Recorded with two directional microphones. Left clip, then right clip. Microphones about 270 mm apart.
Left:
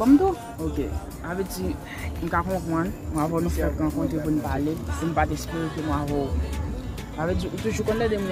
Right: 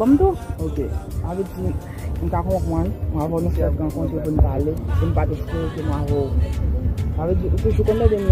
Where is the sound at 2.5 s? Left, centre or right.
Centre.